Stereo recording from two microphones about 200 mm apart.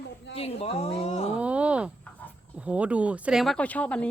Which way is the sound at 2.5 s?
5° right (ahead or behind).